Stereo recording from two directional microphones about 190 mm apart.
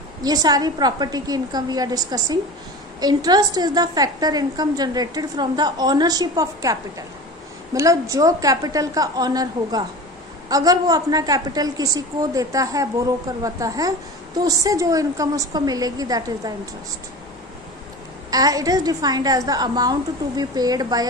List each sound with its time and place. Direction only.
0.2 s a woman's voice: 20° right (ahead or behind)
18.3 s a woman's voice: 20° right (ahead or behind)